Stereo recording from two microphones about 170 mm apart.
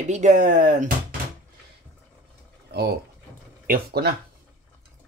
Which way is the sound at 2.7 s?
70° right (ahead or behind).